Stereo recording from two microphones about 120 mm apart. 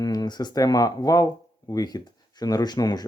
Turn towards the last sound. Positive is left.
turn(degrees=35)  # may be behind; listen again after turning